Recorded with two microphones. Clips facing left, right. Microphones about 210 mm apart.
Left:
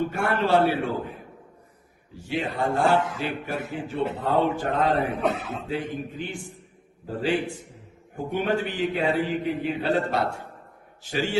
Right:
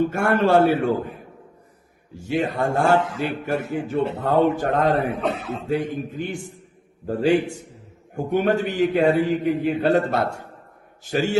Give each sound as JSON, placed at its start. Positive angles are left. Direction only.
{"t": 0.0, "sound": "a man's voice", "side_deg": -45}
{"t": 2.1, "sound": "a man's voice", "side_deg": -45}